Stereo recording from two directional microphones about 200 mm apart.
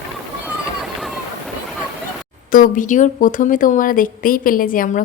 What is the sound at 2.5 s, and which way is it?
Speech, 40° left (ahead or behind).